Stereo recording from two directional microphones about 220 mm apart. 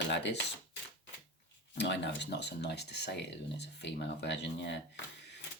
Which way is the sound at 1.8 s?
50° left (ahead or behind).